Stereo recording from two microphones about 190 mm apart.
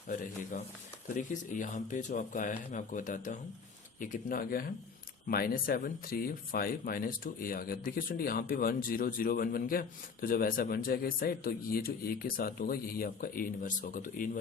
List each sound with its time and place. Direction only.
1.1 s speech: 40° left (ahead or behind)